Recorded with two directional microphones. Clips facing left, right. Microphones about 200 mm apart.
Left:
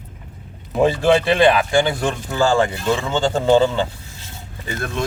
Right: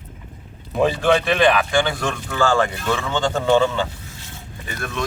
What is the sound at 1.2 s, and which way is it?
Speech, 30° left (ahead or behind).